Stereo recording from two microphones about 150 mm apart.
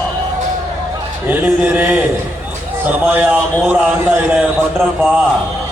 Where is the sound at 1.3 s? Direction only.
15° right (ahead or behind).